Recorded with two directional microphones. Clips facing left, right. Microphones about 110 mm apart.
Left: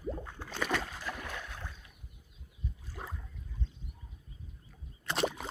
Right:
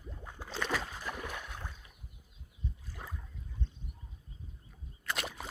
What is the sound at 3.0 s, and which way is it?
Boat, 20° left (ahead or behind).